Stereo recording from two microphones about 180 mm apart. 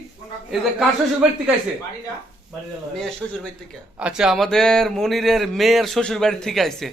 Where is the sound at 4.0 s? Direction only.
5° right (ahead or behind).